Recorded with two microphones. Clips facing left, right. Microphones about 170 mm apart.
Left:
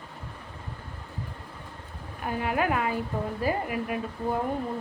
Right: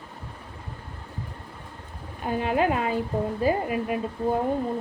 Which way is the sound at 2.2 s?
25° right (ahead or behind).